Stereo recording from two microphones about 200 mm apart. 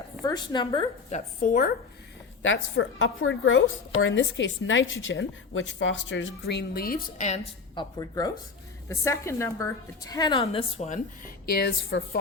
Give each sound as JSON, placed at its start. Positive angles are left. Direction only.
{"t": 0.3, "sound": "a woman's voice", "side_deg": 20}
{"t": 1.4, "sound": "speech", "side_deg": 45}
{"t": 2.4, "sound": "a woman's voice", "side_deg": 70}
{"t": 4.0, "sound": "a woman's voice", "side_deg": 65}
{"t": 7.8, "sound": "a woman's voice", "side_deg": 20}